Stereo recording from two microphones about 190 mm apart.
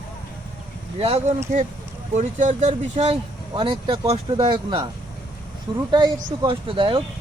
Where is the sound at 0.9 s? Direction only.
30° right (ahead or behind).